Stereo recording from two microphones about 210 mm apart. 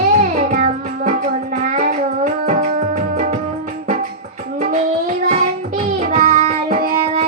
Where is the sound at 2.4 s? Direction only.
35° right (ahead or behind).